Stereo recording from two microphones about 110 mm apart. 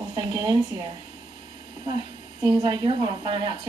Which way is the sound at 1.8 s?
40° right (ahead or behind).